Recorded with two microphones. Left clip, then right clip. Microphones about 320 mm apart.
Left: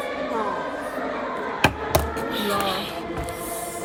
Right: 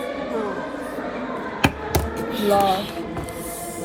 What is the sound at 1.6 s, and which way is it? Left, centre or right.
Chop, centre.